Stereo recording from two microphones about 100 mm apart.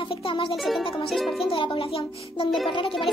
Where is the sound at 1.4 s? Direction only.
60° left (ahead or behind).